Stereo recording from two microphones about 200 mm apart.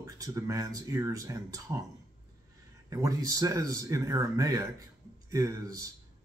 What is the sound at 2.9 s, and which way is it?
Speech, 15° right (ahead or behind).